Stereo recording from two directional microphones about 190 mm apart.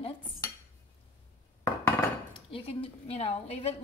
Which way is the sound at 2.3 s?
30° left (ahead or behind).